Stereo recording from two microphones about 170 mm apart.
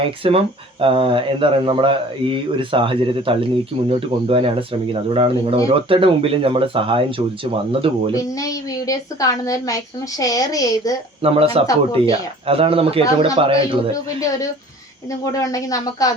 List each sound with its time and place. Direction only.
0.0 s speech: 35° right (ahead or behind)
8.1 s a woman's voice: 20° left (ahead or behind)
11.2 s speech: 35° right (ahead or behind)
11.6 s a woman's voice: 20° left (ahead or behind)
11.9 s speech: 35° right (ahead or behind)
15.1 s a woman's voice: 20° left (ahead or behind)